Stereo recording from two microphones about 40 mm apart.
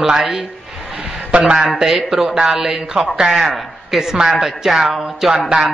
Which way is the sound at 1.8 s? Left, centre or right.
Centre.